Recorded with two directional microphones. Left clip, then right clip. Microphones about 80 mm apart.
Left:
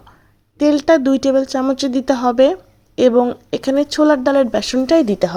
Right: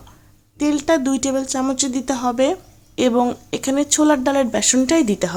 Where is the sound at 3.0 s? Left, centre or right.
Left.